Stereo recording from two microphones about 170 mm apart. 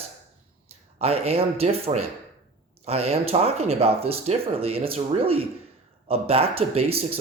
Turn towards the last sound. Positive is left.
turn(degrees=-35)  # may be behind; listen again after turning